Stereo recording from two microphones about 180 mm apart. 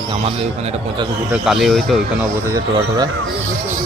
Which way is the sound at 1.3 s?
Centre (ahead or behind).